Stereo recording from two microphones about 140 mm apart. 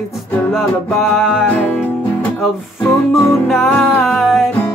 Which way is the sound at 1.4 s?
10° left (ahead or behind).